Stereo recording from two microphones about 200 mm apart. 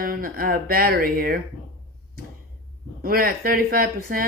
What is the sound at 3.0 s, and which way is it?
Speech, 45° right (ahead or behind).